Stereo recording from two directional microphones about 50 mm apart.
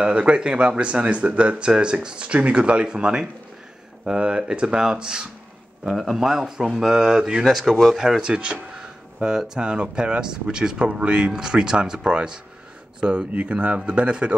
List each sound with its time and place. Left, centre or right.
0.0 s speech: right
7.4 s speech: centre
13.3 s speech: right